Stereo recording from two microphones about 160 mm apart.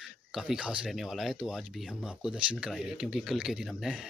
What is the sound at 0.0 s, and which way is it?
Speech, 5° right (ahead or behind).